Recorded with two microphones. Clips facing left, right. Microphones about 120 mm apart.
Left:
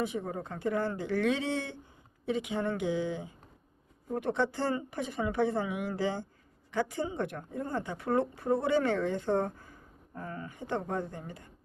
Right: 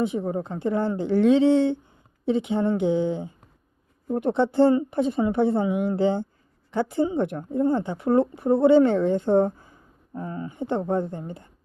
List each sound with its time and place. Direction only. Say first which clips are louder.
0.0 s a woman's voice: right 8 dB; 25° right (ahead or behind)